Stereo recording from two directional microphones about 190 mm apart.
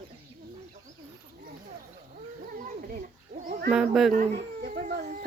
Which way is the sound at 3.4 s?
45° right (ahead or behind).